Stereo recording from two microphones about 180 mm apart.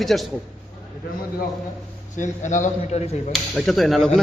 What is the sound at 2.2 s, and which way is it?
Speech, 45° left (ahead or behind).